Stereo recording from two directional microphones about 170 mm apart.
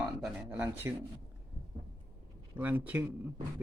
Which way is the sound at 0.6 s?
15° right (ahead or behind).